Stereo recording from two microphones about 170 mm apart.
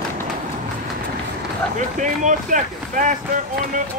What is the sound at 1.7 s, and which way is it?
Speech, 50° right (ahead or behind).